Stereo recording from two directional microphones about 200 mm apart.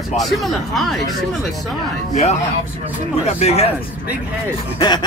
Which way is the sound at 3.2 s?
35° left (ahead or behind).